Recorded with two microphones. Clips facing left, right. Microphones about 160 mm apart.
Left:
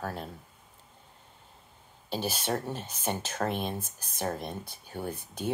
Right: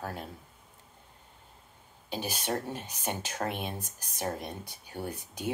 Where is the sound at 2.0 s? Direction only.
10° right (ahead or behind).